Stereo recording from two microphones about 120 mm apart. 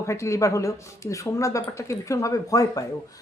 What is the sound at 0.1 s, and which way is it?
Speech, 25° left (ahead or behind).